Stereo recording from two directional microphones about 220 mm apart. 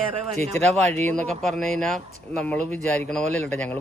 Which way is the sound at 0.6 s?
5° left (ahead or behind).